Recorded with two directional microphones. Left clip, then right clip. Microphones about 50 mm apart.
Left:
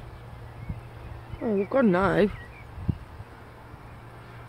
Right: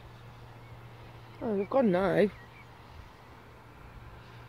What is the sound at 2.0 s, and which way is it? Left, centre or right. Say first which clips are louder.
Speech: left 4 dB; right.